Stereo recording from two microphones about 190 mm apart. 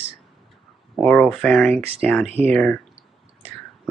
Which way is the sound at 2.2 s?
35° right (ahead or behind).